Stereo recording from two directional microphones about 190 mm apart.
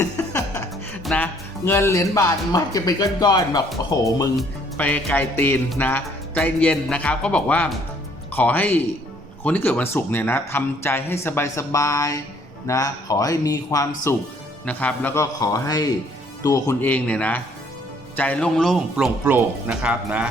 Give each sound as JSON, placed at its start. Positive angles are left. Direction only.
{"t": 0.0, "sound": "chuckle", "side_deg": 15}
{"t": 1.0, "sound": "music", "side_deg": 10}
{"t": 4.4, "sound": "music", "side_deg": 10}
{"t": 18.2, "sound": "speech", "side_deg": 5}